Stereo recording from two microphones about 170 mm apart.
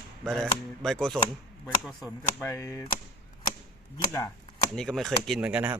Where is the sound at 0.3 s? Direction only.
Centre (ahead or behind).